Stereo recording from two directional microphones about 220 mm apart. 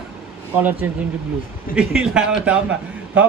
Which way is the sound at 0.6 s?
10° right (ahead or behind).